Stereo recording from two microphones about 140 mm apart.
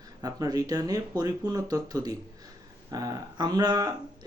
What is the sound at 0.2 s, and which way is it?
Speech, 25° right (ahead or behind).